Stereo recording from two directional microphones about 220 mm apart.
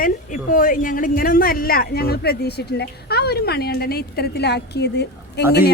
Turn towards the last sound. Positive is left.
turn(degrees=45)  # may be behind; listen again after turning